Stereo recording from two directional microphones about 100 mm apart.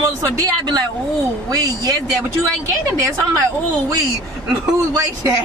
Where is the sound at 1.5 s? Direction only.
40° right (ahead or behind).